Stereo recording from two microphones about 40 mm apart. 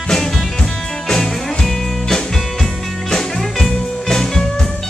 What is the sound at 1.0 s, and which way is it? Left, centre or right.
Music, centre.